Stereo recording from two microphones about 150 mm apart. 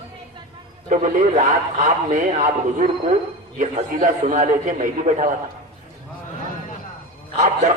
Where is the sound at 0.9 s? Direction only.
55° right (ahead or behind).